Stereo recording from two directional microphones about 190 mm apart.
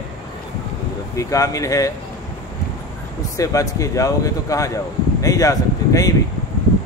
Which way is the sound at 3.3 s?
15° left (ahead or behind).